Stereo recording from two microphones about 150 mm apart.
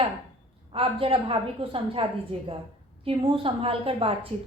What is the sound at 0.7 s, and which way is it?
A woman's voice, 40° right (ahead or behind).